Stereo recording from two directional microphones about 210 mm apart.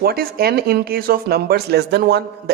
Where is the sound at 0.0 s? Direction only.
45° right (ahead or behind).